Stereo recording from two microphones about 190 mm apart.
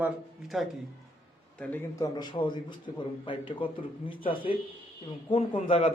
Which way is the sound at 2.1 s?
25° left (ahead or behind).